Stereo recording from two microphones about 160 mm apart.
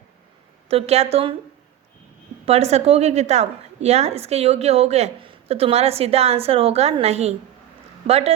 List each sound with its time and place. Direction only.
0.7 s a woman's voice: 40° right (ahead or behind)
2.5 s a woman's voice: 40° right (ahead or behind)